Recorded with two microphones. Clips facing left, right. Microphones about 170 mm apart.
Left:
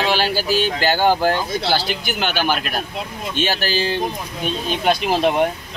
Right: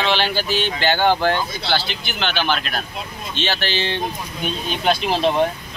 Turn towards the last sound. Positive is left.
turn(degrees=10)  # may be behind; listen again after turning